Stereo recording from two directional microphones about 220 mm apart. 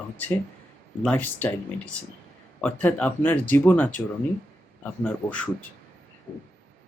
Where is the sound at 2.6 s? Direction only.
5° left (ahead or behind).